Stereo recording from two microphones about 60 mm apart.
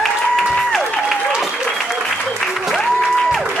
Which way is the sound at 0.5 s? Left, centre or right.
Centre.